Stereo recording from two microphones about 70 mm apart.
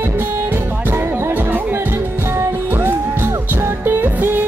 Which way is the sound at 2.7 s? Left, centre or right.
Right.